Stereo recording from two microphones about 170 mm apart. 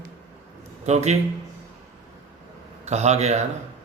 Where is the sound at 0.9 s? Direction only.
40° right (ahead or behind).